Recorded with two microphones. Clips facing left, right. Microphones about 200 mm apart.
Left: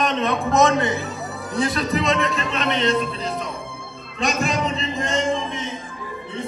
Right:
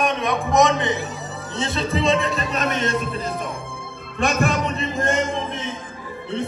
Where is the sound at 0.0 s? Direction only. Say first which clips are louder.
Left 1 dB; 15° right (ahead or behind); by 3.0 s 45° right (ahead or behind).